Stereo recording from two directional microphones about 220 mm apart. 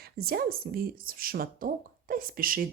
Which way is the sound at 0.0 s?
45° right (ahead or behind).